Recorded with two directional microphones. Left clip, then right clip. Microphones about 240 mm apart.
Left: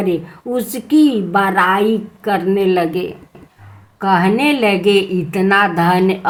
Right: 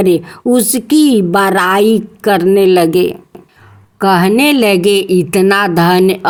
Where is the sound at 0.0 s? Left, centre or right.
Right.